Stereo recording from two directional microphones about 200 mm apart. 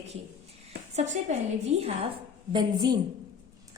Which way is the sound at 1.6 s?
30° right (ahead or behind).